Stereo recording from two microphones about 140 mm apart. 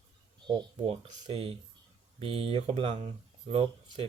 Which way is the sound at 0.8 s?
55° right (ahead or behind).